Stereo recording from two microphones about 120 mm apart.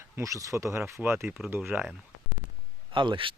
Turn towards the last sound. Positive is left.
turn(degrees=-45)  # may be behind; listen again after turning